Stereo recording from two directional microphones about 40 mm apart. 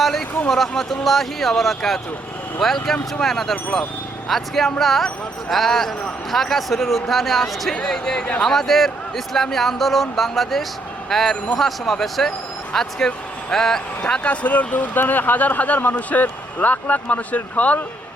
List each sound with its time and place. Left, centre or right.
0.0 s a man's voice: centre
3.5 s speech: centre
4.3 s a man's voice: centre
14.3 s speech: left